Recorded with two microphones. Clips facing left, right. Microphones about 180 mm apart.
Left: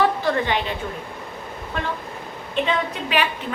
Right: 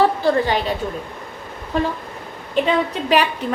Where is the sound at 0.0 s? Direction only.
35° right (ahead or behind).